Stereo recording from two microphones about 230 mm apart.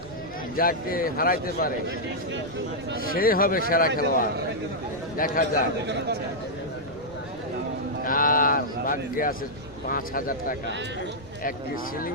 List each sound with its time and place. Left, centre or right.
0.5 s speech: left
3.0 s speech: left
8.0 s speech: left